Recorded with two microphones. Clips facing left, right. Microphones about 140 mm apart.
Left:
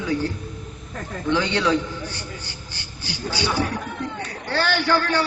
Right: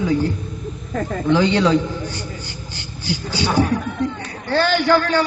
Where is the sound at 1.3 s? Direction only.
15° right (ahead or behind).